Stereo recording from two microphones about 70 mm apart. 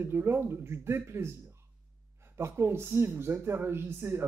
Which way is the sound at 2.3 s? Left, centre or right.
Right.